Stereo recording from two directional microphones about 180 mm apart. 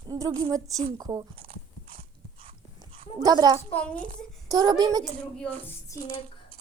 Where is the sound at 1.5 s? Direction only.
30° right (ahead or behind).